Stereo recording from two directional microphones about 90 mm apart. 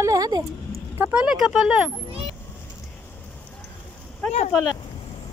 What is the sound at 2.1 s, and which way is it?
Vehicle, 90° right.